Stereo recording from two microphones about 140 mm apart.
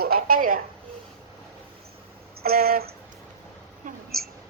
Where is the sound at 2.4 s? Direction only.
90° right.